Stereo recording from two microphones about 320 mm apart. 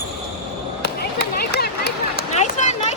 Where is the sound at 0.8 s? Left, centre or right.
Left.